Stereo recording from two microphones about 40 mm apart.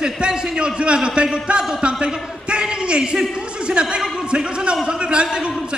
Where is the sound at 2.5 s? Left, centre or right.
Right.